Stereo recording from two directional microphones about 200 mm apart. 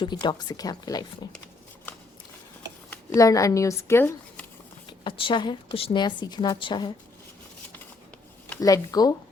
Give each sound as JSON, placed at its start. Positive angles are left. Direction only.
{"t": 0.0, "sound": "a woman's voice", "side_deg": 20}
{"t": 2.9, "sound": "speech", "side_deg": 15}
{"t": 5.0, "sound": "a woman's voice", "side_deg": 25}
{"t": 8.4, "sound": "speech", "side_deg": 15}